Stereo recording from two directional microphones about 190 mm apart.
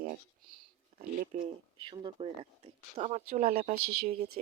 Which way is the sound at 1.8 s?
25° right (ahead or behind).